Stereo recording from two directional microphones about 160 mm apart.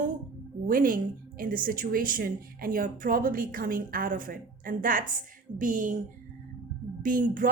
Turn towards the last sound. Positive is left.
turn(degrees=-60)  # may be behind; listen again after turning